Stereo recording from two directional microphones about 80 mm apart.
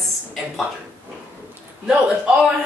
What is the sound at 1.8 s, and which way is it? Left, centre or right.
Speech, centre.